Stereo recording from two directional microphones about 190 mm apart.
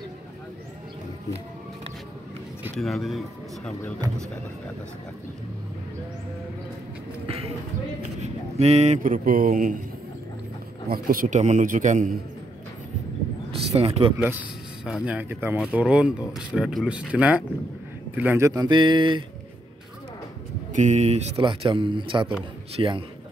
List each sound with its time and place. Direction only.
2.8 s speech: centre (ahead or behind)
8.2 s speech: 35° right (ahead or behind)
10.9 s a man's voice: 50° right (ahead or behind)
13.5 s a sound: 30° right (ahead or behind)
15.0 s a man's voice: 10° right (ahead or behind); by 19.2 s 25° right (ahead or behind)
20.7 s a man's voice: 40° right (ahead or behind)